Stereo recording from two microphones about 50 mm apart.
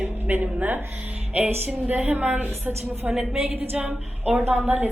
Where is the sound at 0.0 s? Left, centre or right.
Right.